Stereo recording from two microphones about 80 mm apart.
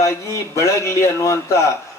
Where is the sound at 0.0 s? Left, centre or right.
Left.